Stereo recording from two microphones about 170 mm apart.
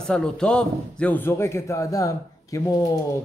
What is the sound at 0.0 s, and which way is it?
A man's voice, 5° left (ahead or behind).